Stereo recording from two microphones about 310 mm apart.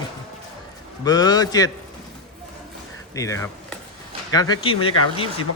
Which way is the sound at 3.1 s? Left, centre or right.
Centre.